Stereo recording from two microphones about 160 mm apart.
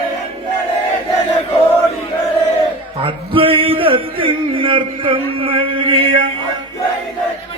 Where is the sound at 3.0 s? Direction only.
35° right (ahead or behind).